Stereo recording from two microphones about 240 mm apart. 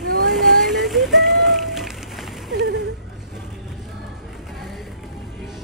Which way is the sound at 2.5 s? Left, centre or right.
Right.